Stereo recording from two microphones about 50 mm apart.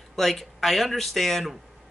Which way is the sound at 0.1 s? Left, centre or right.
Centre.